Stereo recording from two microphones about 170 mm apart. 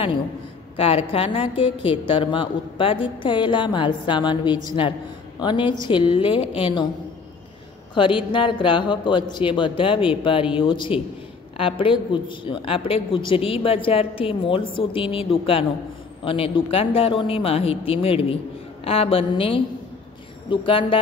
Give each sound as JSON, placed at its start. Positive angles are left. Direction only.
{"t": 0.7, "sound": "a woman's voice", "side_deg": 35}
{"t": 7.9, "sound": "a woman's voice", "side_deg": 30}